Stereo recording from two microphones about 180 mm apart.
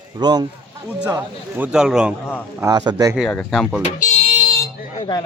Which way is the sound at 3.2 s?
Centre (ahead or behind).